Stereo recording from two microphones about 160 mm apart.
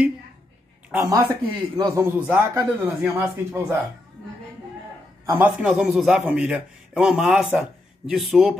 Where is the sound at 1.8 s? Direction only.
20° right (ahead or behind).